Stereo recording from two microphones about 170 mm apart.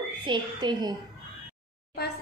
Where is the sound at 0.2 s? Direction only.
25° right (ahead or behind).